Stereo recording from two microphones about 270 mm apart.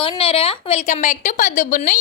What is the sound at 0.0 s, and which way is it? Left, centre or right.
A woman's voice, centre.